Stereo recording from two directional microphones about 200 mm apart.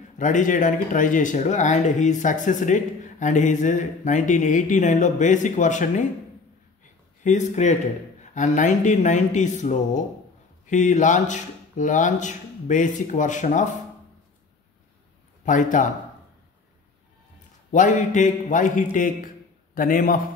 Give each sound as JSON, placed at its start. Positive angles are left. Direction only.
{"t": 0.2, "sound": "speech", "side_deg": 40}
{"t": 7.2, "sound": "speech", "side_deg": 35}
{"t": 15.4, "sound": "speech", "side_deg": 40}
{"t": 17.6, "sound": "a man's voice", "side_deg": 40}